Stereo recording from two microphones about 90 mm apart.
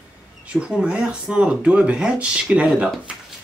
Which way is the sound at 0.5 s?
10° right (ahead or behind).